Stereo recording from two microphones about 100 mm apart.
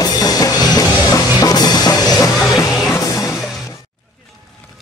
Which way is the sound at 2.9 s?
25° left (ahead or behind).